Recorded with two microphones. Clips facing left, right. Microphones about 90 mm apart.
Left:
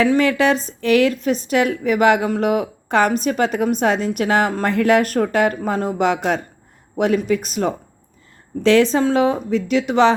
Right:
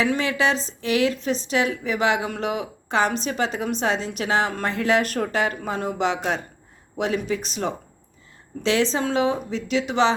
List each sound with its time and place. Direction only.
0.2 s a woman's voice: 50° left (ahead or behind)
8.8 s a woman's voice: 45° left (ahead or behind)